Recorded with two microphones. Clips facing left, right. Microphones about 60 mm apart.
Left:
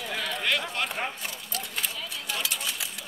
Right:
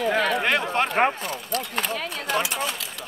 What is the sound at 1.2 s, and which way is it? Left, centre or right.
Speech, right.